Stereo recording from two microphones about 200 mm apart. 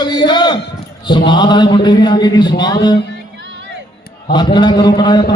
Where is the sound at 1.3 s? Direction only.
20° left (ahead or behind).